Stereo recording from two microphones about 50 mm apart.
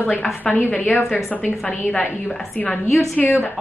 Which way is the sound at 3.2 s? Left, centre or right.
Left.